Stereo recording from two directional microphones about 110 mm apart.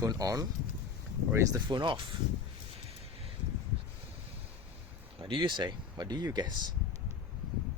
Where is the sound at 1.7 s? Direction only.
45° right (ahead or behind).